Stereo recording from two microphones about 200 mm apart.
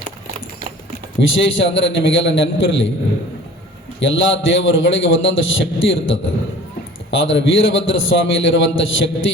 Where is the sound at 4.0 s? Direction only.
70° left (ahead or behind).